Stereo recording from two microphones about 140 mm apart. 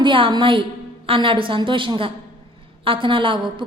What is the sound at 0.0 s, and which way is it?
A woman's voice, 35° right (ahead or behind).